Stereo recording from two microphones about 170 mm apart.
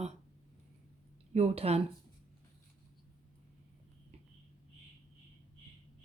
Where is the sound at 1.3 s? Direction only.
40° right (ahead or behind).